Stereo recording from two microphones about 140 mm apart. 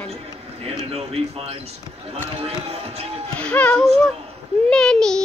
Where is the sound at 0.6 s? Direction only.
45° right (ahead or behind).